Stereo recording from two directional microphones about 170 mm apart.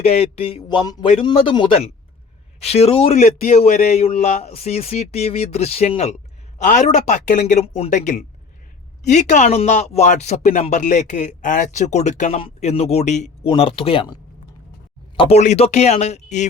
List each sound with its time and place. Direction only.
0.0 s speech: 35° left (ahead or behind)